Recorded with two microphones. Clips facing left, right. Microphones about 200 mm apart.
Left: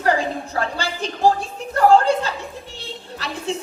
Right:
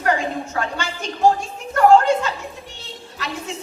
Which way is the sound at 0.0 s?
35° left (ahead or behind).